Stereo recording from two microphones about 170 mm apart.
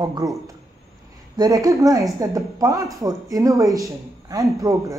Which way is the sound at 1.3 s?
25° right (ahead or behind).